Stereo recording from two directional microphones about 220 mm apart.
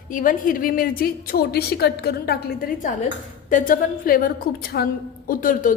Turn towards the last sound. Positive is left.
turn(degrees=40)  # may be behind; listen again after turning